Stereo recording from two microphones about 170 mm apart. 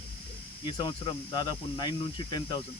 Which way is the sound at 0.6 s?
25° left (ahead or behind).